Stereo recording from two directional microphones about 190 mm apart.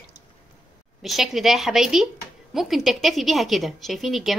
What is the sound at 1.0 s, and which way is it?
A woman's voice, centre (ahead or behind).